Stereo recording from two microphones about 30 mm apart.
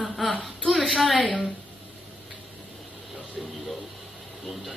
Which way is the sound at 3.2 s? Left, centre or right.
Centre.